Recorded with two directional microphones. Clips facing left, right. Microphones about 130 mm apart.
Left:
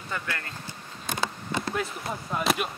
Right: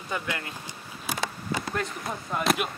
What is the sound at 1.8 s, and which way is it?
Speech, centre (ahead or behind).